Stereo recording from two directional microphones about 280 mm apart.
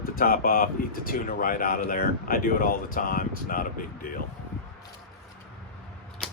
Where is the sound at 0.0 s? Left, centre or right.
Left.